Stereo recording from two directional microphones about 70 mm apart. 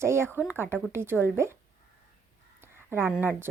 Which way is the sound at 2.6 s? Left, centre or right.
Right.